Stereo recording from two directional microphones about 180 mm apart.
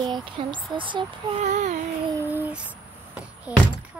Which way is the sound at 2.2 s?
10° right (ahead or behind).